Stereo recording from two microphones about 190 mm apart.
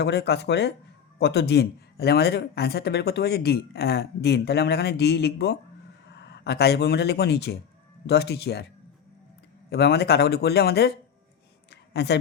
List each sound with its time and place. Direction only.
0.0 s speech: 65° left (ahead or behind)
9.6 s speech: 60° left (ahead or behind)
11.7 s a sound: 60° left (ahead or behind)